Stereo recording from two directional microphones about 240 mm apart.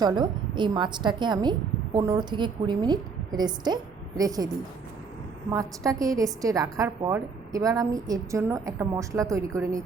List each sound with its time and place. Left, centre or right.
0.0 s a woman's voice: centre